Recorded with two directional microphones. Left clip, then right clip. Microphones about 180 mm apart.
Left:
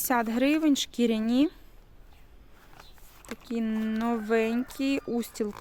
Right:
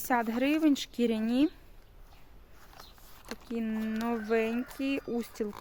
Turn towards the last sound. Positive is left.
turn(degrees=40)  # may be behind; listen again after turning